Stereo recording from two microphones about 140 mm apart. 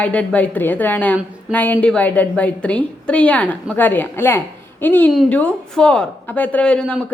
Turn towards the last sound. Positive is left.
turn(degrees=5)  # may be behind; listen again after turning